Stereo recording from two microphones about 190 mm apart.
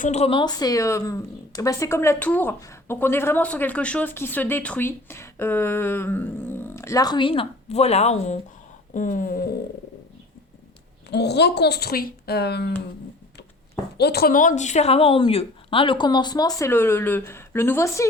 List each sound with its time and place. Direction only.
0.0 s a woman's voice: 35° left (ahead or behind); by 9.6 s 50° left (ahead or behind)
11.1 s speech: 60° left (ahead or behind)
14.0 s a woman's voice: 55° left (ahead or behind); by 18.1 s 15° left (ahead or behind)